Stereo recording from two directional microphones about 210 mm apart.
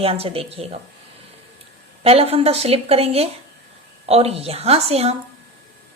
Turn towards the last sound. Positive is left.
turn(degrees=-30)  # may be behind; listen again after turning